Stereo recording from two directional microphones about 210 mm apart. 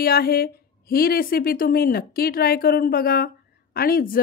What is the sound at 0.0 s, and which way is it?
A woman's voice, 45° left (ahead or behind).